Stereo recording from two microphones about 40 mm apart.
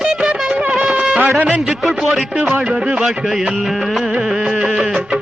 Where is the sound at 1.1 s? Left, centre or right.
Right.